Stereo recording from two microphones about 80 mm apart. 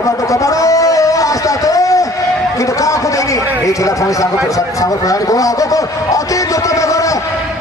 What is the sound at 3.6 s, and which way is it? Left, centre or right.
A man's voice, left.